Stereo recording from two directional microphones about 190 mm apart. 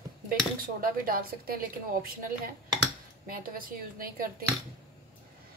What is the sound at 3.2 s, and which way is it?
Speech, 50° right (ahead or behind).